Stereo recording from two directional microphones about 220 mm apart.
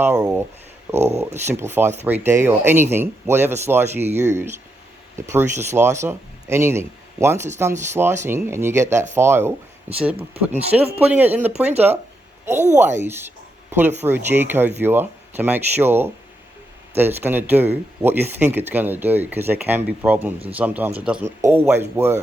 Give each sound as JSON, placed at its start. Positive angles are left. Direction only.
{"t": 0.0, "sound": "speech", "side_deg": -15}
{"t": 0.9, "sound": "speech", "side_deg": -30}
{"t": 1.2, "sound": "speech", "side_deg": -10}
{"t": 13.0, "sound": "a sound", "side_deg": -10}
{"t": 14.0, "sound": "speech", "side_deg": -10}